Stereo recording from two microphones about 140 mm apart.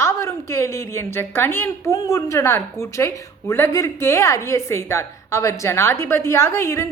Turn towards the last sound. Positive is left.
turn(degrees=20)  # may be behind; listen again after turning